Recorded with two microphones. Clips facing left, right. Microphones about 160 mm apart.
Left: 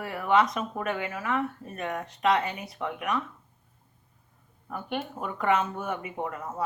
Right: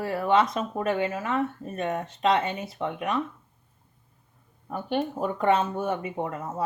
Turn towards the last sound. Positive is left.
turn(degrees=-25)  # may be behind; listen again after turning